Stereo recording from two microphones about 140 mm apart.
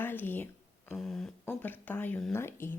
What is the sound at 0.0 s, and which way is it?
Speech, 15° left (ahead or behind).